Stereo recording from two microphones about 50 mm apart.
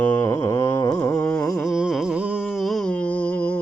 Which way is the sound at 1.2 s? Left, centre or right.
Left.